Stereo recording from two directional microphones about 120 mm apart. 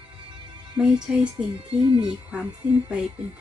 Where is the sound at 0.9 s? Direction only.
40° right (ahead or behind).